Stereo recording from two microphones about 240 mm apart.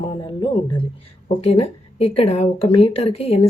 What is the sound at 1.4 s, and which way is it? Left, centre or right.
Speech, left.